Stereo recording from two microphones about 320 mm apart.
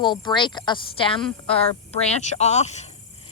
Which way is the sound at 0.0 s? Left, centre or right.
Centre.